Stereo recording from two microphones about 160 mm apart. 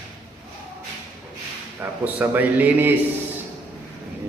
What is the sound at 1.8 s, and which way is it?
A man's voice, 10° right (ahead or behind).